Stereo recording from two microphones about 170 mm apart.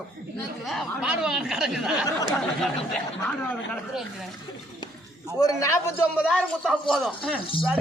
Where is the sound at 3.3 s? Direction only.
5° left (ahead or behind).